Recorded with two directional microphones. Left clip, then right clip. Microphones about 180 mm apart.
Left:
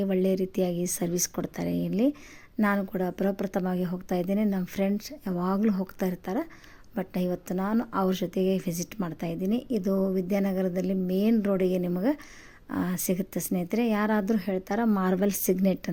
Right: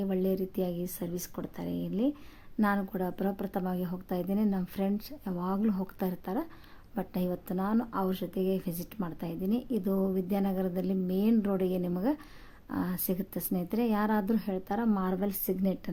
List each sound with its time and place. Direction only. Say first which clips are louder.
0.0 s speech: left 5 dB; 15° left (ahead or behind)